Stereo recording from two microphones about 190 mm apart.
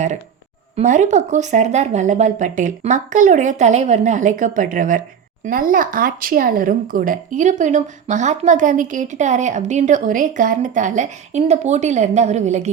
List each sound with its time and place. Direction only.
0.8 s speech: 40° right (ahead or behind)